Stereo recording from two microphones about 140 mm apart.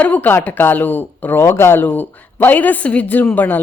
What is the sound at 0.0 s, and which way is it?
Speech, 10° left (ahead or behind).